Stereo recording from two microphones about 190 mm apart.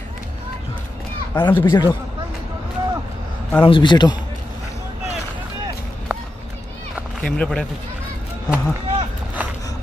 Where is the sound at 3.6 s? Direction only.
25° left (ahead or behind).